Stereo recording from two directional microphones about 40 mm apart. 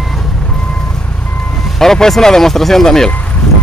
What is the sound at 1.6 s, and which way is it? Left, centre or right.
Speech, centre.